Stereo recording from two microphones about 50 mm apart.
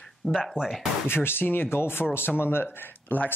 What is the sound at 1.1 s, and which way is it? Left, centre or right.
Speech, left.